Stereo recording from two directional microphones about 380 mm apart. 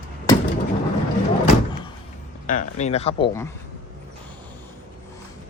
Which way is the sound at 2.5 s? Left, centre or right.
Centre.